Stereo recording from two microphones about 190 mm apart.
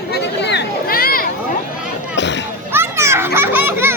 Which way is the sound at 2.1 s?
70° left (ahead or behind).